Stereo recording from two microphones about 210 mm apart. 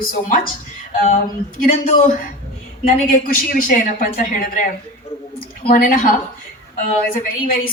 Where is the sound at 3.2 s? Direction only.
40° left (ahead or behind).